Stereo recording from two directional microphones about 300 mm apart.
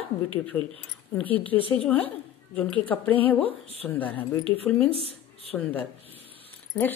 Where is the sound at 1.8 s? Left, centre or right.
Centre.